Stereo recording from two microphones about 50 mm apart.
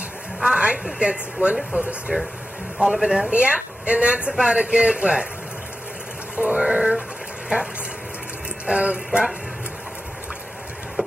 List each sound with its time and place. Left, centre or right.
0.4 s a man's voice: centre
2.8 s a man's voice: centre
3.3 s a woman's voice: right
6.3 s speech: right
8.6 s a woman's voice: right
11.0 s a sound: right